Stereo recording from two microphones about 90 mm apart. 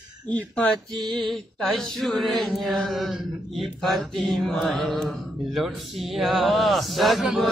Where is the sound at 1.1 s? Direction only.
5° left (ahead or behind).